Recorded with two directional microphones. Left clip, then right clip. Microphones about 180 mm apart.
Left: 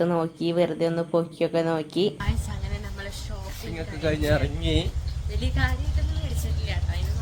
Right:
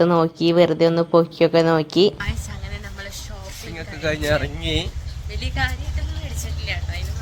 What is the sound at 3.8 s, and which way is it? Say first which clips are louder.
Speech: right 3 dB; 10° right (ahead or behind).